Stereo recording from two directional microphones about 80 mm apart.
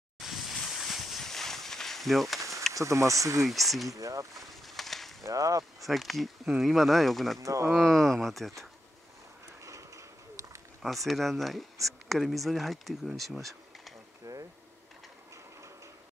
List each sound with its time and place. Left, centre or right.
0.2 s boat: centre
2.7 s speech: right
3.4 s speech: centre
3.9 s speech: right
4.4 s a sound: centre
5.2 s whip: right
5.9 s speech: centre
7.3 s speech: right
7.8 s speech: centre
9.6 s a sound: right
11.1 s speech: centre
14.2 s bee: right